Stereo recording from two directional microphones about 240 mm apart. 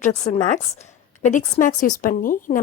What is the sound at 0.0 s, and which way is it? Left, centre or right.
A woman's voice, left.